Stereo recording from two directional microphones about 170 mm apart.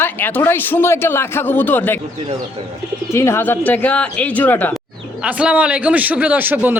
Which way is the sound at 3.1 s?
15° left (ahead or behind).